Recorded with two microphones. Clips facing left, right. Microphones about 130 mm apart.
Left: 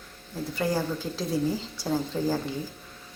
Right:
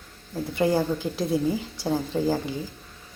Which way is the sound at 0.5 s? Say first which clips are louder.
Right 5 dB; 20° right (ahead or behind).